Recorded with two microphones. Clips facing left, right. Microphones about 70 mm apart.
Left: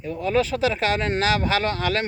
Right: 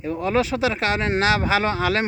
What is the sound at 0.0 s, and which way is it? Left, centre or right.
A woman's voice, right.